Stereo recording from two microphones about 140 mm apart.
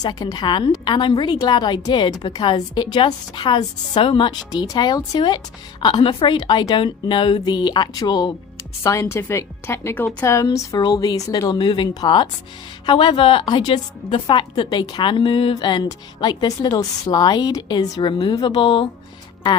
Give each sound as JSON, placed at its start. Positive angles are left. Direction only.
{"t": 0.0, "sound": "a woman's voice", "side_deg": 30}